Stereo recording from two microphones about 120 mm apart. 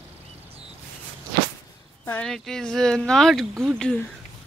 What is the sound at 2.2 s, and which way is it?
Speech, 5° left (ahead or behind).